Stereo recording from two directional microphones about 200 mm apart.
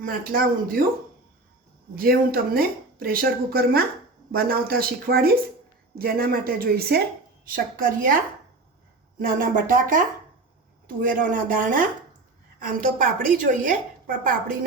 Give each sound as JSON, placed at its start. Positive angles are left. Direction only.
{"t": 0.0, "sound": "speech", "side_deg": -45}
{"t": 2.0, "sound": "speech", "side_deg": -50}